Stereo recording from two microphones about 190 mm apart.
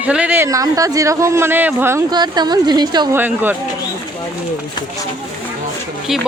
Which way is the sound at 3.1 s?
10° right (ahead or behind).